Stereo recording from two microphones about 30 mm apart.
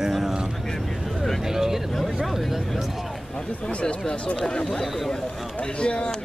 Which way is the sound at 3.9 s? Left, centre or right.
Left.